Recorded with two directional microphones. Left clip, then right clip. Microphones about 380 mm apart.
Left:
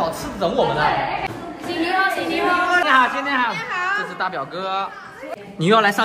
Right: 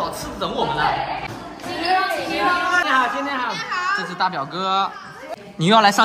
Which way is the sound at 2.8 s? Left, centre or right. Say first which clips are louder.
Left 3 dB; left.